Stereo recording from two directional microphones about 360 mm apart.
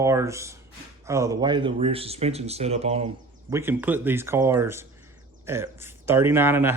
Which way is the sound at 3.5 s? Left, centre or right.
Centre.